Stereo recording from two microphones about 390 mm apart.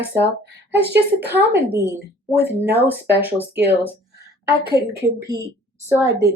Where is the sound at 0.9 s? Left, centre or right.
Centre.